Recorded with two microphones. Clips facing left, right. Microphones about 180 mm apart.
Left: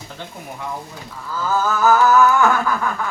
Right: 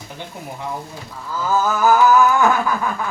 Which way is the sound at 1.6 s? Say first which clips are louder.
Even; 15° right (ahead or behind).